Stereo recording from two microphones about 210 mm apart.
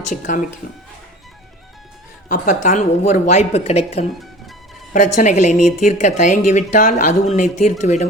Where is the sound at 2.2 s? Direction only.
40° left (ahead or behind).